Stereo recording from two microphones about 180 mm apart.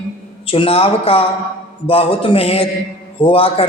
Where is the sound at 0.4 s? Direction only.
30° left (ahead or behind).